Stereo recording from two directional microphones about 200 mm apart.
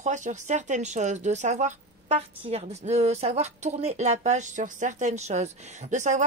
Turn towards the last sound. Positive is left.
turn(degrees=-35)  # may be behind; listen again after turning